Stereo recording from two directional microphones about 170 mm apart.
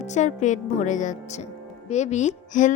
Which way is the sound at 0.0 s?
45° left (ahead or behind).